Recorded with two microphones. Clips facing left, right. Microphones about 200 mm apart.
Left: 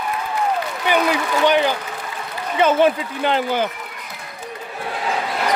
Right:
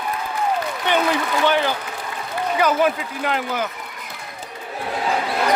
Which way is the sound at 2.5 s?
25° left (ahead or behind).